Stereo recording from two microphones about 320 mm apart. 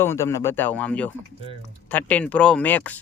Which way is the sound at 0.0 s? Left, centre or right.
Centre.